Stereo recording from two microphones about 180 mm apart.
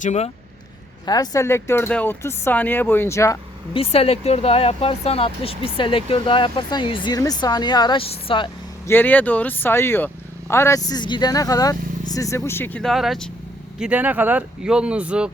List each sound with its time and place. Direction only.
0.0 s speech: 40° left (ahead or behind)
1.0 s speech: 20° left (ahead or behind)
3.8 s speech: 35° left (ahead or behind)
8.9 s speech: 10° left (ahead or behind); by 15.3 s 5° right (ahead or behind)